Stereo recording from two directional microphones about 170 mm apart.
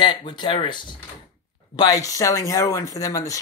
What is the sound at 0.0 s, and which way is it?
Speech, 30° left (ahead or behind).